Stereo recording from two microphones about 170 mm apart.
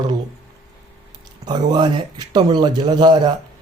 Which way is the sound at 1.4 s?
25° right (ahead or behind).